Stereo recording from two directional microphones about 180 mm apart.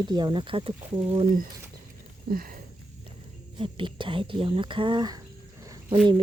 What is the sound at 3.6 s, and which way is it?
Speech, 30° right (ahead or behind).